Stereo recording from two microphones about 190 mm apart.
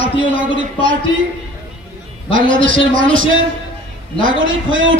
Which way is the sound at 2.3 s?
90° right.